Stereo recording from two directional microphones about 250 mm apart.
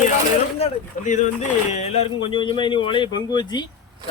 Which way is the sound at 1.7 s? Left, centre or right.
Left.